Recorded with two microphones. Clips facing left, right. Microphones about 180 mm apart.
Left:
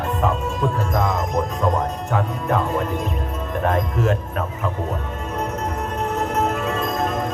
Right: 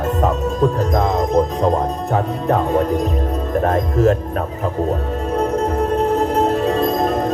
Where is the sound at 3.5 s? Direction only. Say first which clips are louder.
Right 3 dB; 40° right (ahead or behind).